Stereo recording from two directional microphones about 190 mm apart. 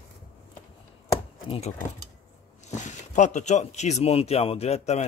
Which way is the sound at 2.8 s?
40° left (ahead or behind).